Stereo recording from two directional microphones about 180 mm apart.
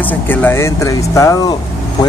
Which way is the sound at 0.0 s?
10° left (ahead or behind).